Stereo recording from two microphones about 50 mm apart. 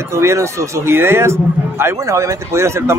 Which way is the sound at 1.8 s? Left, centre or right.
Right.